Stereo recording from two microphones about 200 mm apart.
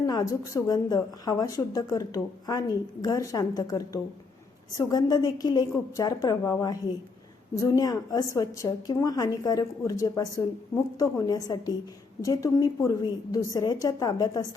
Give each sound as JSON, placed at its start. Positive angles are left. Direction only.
{"t": 0.0, "sound": "a woman's voice", "side_deg": 20}